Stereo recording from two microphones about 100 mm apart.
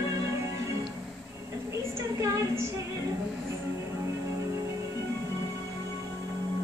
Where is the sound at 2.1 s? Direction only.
30° right (ahead or behind).